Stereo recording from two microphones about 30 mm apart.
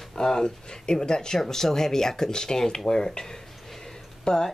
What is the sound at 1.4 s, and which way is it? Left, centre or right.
Speech, centre.